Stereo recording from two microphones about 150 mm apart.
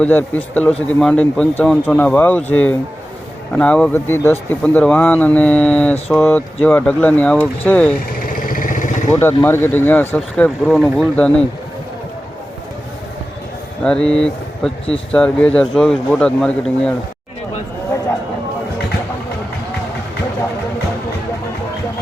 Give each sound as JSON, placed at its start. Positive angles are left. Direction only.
{"t": 0.0, "sound": "speech", "side_deg": 10}
{"t": 7.9, "sound": "vehicle", "side_deg": 75}
{"t": 9.1, "sound": "speech", "side_deg": 15}
{"t": 13.8, "sound": "speech", "side_deg": 5}